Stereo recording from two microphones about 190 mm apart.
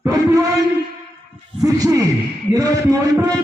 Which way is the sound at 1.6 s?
20° right (ahead or behind).